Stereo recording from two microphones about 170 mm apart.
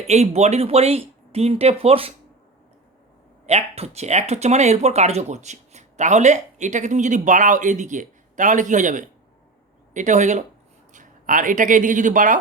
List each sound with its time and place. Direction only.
0.1 s speech: 40° right (ahead or behind)
3.4 s speech: 40° right (ahead or behind)